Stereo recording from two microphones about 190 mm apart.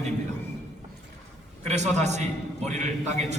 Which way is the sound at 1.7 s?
35° right (ahead or behind).